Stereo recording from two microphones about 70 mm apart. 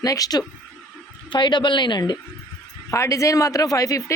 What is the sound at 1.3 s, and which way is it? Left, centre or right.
Speech, left.